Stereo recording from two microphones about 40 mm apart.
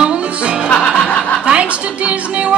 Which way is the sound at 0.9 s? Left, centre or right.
Left.